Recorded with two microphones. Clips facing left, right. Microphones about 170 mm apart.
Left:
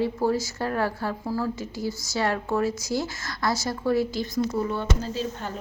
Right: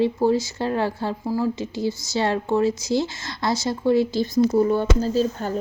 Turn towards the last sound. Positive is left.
turn(degrees=-35)  # may be behind; listen again after turning